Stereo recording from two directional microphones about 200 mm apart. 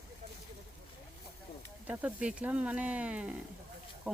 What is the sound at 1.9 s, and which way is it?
Speech, 5° right (ahead or behind).